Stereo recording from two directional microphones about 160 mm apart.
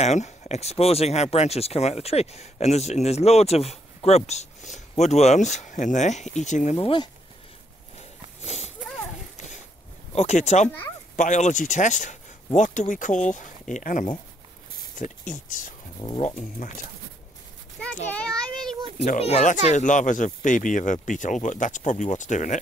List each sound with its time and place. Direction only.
0.0 s speech: 45° left (ahead or behind)
8.5 s speech: 45° left (ahead or behind)
10.1 s speech: 45° left (ahead or behind)
16.0 s speech: 20° left (ahead or behind)
16.3 s speech: 50° left (ahead or behind)
17.8 s a sound: 5° left (ahead or behind)
18.1 s a child's voice: 5° left (ahead or behind)
19.1 s speech: 40° left (ahead or behind)